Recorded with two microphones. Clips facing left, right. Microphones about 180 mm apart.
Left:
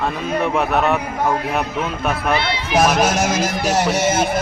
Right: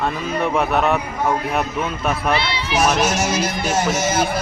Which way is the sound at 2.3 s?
50° left (ahead or behind).